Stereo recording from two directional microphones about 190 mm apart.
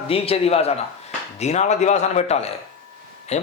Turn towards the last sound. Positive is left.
turn(degrees=35)  # may be behind; listen again after turning